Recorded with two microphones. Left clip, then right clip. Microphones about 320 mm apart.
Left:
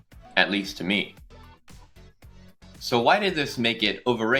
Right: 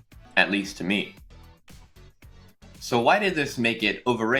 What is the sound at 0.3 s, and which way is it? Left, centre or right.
Speech, left.